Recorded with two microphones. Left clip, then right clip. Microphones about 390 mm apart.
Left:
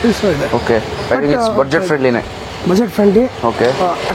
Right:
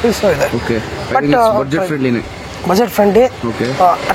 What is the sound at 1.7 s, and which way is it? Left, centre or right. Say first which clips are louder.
Speech: left 3 dB; left.